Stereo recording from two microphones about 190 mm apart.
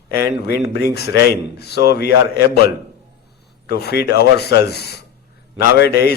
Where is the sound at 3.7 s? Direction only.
55° left (ahead or behind).